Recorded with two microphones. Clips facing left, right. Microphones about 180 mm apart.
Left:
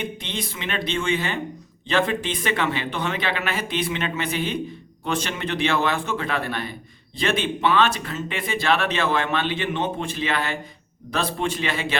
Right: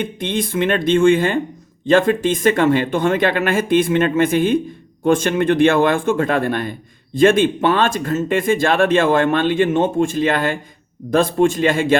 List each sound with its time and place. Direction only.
0.0 s a man's voice: 50° right (ahead or behind)